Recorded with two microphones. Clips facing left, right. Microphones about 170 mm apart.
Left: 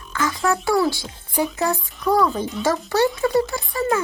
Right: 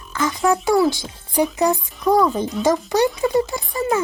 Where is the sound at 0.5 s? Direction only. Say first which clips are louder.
Right 3 dB; 20° right (ahead or behind).